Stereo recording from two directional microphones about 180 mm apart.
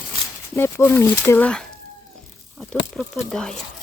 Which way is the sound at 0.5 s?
15° left (ahead or behind).